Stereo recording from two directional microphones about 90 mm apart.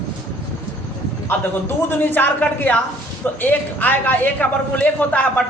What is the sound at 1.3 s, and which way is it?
A man's voice, 25° left (ahead or behind).